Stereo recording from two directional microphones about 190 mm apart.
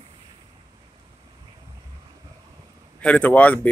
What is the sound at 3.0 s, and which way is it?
Speech, 5° left (ahead or behind).